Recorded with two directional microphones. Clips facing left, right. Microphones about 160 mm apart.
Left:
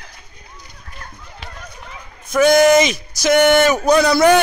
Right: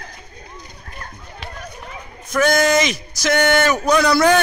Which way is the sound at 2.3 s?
15° left (ahead or behind).